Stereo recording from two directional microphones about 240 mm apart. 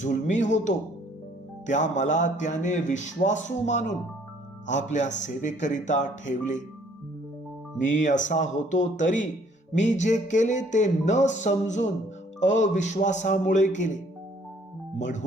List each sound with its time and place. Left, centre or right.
0.0 s speech: left
7.9 s speech: left